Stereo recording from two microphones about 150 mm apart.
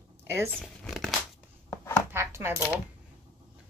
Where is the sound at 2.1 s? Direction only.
15° right (ahead or behind).